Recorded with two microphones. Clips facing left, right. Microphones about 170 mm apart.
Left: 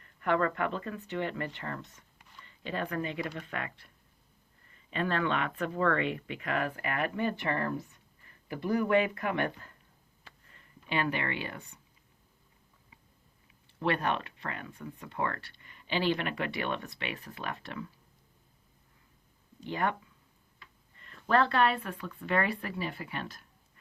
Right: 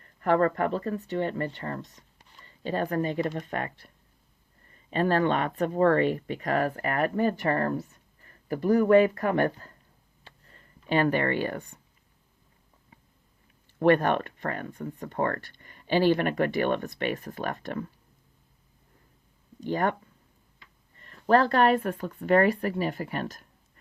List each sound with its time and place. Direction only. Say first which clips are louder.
0.0 s speech: right 6 dB; 40° right (ahead or behind)
10.2 s a sound: right 4 dB; 40° right (ahead or behind)
13.7 s speech: right 9 dB; 50° right (ahead or behind)
19.5 s speech: right 5 dB; 45° right (ahead or behind)